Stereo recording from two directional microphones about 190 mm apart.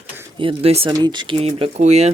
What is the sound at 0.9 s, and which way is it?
Speech, 20° right (ahead or behind).